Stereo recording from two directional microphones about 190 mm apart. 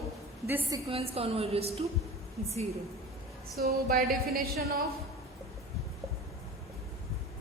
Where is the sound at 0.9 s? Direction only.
30° right (ahead or behind).